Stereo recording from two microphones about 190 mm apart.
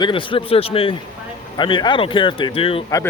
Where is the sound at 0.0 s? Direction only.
25° left (ahead or behind).